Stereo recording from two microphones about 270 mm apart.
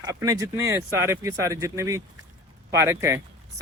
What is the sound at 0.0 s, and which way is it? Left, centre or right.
Speech, centre.